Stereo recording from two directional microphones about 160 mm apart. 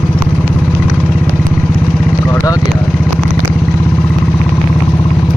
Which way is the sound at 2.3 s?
20° left (ahead or behind).